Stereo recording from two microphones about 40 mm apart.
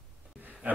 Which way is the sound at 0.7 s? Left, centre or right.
Right.